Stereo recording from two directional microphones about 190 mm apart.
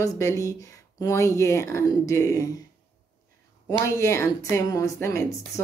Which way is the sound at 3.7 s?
15° left (ahead or behind).